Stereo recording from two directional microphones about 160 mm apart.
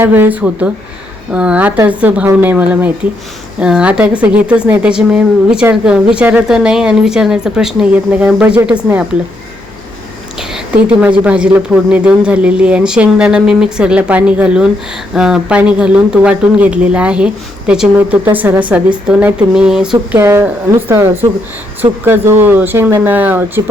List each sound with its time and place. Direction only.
0.0 s a woman's voice: 10° right (ahead or behind)
10.5 s a sound: 5° right (ahead or behind)
11.3 s a woman's voice: 5° right (ahead or behind)
20.1 s speech: 15° right (ahead or behind)